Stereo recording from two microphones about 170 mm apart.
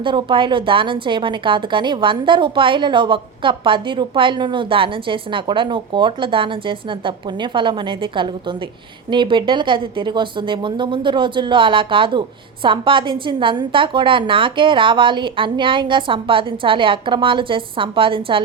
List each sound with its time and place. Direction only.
0.0 s a woman's voice: 30° right (ahead or behind)